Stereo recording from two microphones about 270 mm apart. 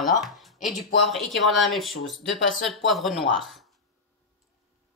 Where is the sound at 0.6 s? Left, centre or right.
Centre.